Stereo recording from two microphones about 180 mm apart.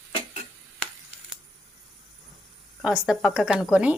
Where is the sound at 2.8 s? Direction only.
5° right (ahead or behind).